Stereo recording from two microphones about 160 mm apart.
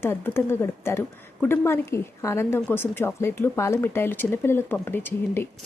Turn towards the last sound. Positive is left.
turn(degrees=15)  # may be behind; listen again after turning